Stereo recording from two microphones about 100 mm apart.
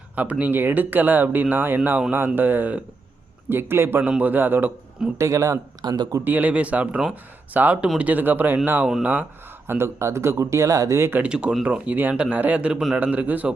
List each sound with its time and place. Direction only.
0.2 s speech: 15° right (ahead or behind)
5.1 s speech: 30° right (ahead or behind)
6.2 s speech: 15° right (ahead or behind)
11.2 s speech: 10° right (ahead or behind)